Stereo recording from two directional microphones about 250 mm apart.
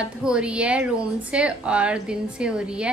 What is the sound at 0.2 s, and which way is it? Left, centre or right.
A woman's voice, centre.